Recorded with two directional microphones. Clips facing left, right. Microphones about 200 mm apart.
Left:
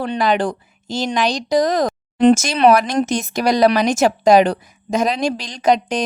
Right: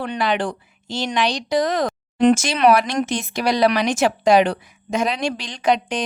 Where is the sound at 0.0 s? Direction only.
40° left (ahead or behind).